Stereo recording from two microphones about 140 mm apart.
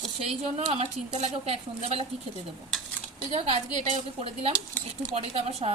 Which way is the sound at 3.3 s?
45° right (ahead or behind).